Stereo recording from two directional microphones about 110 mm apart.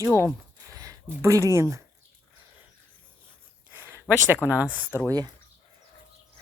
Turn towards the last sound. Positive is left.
turn(degrees=-35)  # may be behind; listen again after turning